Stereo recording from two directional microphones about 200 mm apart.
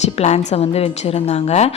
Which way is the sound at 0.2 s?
30° left (ahead or behind).